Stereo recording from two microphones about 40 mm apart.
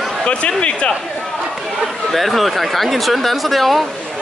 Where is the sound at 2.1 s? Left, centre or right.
Centre.